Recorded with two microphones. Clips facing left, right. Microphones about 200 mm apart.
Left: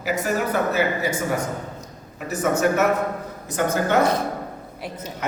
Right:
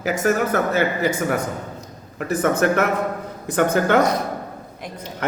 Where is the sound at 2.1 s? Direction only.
55° right (ahead or behind).